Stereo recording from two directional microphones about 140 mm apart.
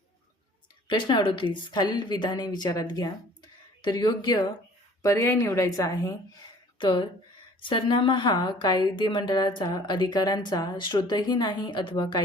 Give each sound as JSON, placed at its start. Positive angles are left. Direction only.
{"t": 0.9, "sound": "a woman's voice", "side_deg": 35}
{"t": 5.0, "sound": "a woman's voice", "side_deg": 20}
{"t": 6.7, "sound": "a woman's voice", "side_deg": 35}